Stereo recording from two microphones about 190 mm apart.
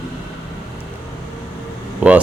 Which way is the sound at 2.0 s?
10° right (ahead or behind).